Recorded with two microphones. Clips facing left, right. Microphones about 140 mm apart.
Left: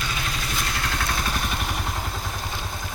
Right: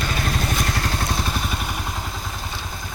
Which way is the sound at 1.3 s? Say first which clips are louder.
Right 1 dB; centre (ahead or behind).